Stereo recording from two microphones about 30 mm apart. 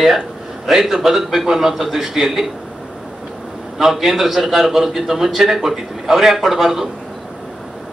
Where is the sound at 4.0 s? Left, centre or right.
Centre.